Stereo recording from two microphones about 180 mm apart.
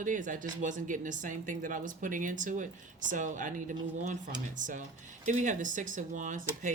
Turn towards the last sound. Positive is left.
turn(degrees=-45)  # may be behind; listen again after turning